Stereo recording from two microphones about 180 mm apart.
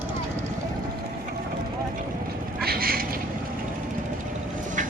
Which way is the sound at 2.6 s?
55° right (ahead or behind).